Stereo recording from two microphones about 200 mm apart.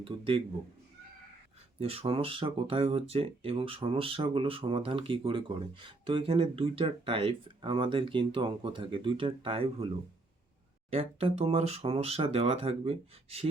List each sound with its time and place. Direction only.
0.0 s speech: 25° right (ahead or behind)
1.8 s speech: 30° right (ahead or behind)
10.9 s speech: 30° right (ahead or behind)